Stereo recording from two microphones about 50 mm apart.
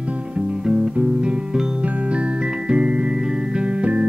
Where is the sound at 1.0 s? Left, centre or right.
Right.